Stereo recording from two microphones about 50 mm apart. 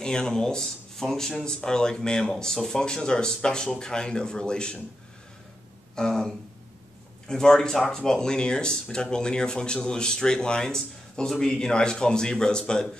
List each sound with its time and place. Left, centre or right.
0.0 s speech: centre
2.5 s speech: centre
2.8 s speech: centre
5.9 s speech: centre